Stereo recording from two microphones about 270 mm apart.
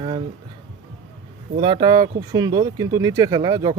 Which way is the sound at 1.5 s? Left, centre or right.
Centre.